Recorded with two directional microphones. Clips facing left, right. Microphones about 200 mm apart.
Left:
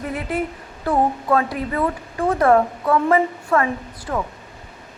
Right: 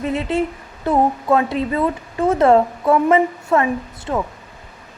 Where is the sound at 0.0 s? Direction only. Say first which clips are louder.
Right 4 dB; 25° right (ahead or behind).